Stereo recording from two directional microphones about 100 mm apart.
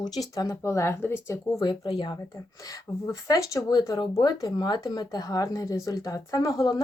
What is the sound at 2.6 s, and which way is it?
Speech, 35° left (ahead or behind).